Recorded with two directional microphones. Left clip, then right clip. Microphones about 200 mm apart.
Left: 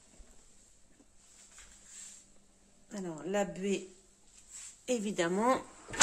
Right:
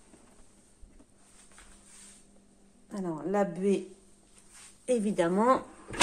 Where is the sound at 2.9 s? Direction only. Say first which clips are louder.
Right 5 dB; centre (ahead or behind).